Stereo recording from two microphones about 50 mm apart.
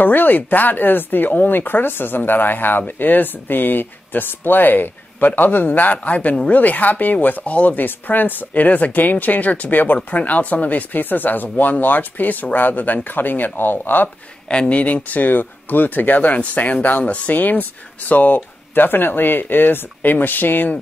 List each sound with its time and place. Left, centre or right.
0.0 s speech: left
14.0 s speech: left